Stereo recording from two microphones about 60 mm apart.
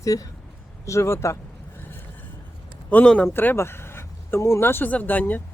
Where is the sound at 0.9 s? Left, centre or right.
Left.